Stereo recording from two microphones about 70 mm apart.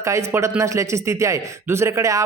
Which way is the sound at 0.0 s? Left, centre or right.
Right.